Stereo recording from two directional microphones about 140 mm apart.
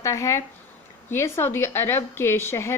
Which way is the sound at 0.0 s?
20° left (ahead or behind).